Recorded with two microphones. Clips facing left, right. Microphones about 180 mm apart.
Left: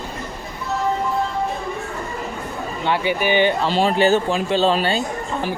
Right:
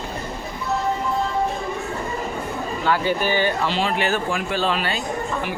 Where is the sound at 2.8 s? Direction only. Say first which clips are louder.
Left 1 dB; 20° left (ahead or behind).